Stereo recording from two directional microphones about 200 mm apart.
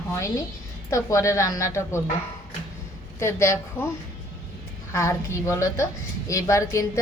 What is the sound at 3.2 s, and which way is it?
Speech, 15° left (ahead or behind).